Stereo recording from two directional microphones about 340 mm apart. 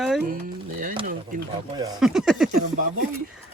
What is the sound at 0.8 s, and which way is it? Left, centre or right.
Speech, right.